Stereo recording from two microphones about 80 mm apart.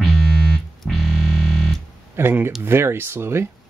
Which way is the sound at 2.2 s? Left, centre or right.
Right.